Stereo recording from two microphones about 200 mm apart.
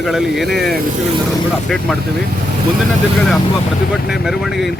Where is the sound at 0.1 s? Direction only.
Centre (ahead or behind).